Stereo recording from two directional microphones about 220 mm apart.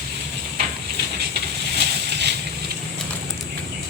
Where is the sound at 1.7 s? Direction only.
50° right (ahead or behind).